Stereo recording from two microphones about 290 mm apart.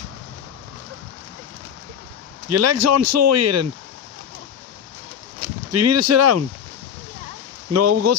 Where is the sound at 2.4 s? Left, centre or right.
Right.